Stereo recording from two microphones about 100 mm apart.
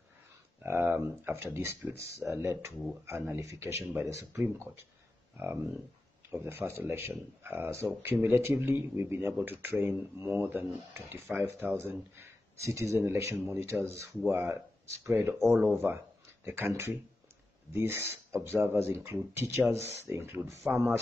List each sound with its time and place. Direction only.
0.6 s speech: 20° right (ahead or behind)
6.3 s speech: 20° right (ahead or behind)
15.3 s speech: centre (ahead or behind)
15.6 s speech: 20° right (ahead or behind)